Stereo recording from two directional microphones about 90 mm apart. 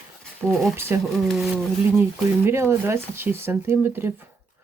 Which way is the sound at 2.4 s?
30° right (ahead or behind).